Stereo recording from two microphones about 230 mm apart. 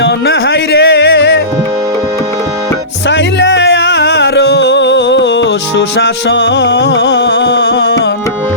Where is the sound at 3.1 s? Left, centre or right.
Left.